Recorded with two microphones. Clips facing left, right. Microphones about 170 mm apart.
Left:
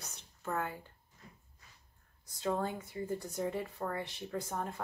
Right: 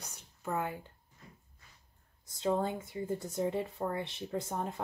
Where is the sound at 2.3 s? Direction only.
20° right (ahead or behind).